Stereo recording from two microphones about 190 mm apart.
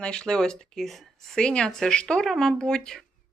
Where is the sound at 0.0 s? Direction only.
5° left (ahead or behind).